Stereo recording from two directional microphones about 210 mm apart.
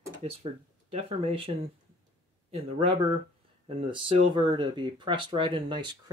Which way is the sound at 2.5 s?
25° right (ahead or behind).